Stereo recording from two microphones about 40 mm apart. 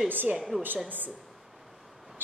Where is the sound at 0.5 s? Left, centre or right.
Centre.